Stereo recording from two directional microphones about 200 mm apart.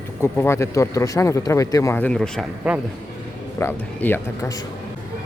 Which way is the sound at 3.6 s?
10° left (ahead or behind).